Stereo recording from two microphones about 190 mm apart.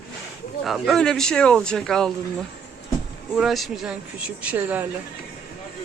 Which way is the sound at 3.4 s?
Centre (ahead or behind).